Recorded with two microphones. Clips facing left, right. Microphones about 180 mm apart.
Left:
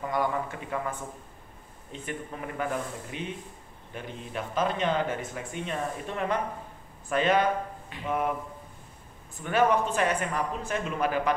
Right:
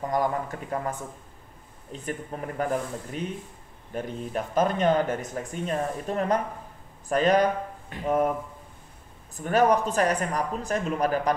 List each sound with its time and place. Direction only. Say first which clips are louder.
0.1 s speech: right 2 dB; 40° right (ahead or behind)
9.4 s speech: right 3 dB; 40° right (ahead or behind)